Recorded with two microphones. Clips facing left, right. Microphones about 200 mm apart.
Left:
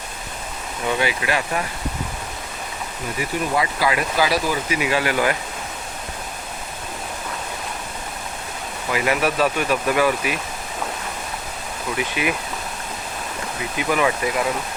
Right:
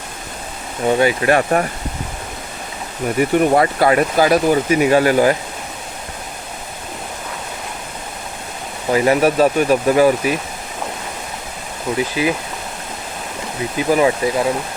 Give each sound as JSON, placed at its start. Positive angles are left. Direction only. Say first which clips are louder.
{"t": 0.9, "sound": "speech", "louder": "right 8 dB", "side_deg": -40}
{"t": 3.2, "sound": "speech", "louder": "right 9 dB", "side_deg": -55}
{"t": 8.9, "sound": "speech", "louder": "right 7 dB", "side_deg": -35}
{"t": 11.9, "sound": "speech", "louder": "right 6 dB", "side_deg": -30}
{"t": 13.7, "sound": "speech", "louder": "right 6 dB", "side_deg": -30}